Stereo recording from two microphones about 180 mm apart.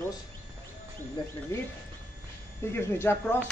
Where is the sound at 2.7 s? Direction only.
15° left (ahead or behind).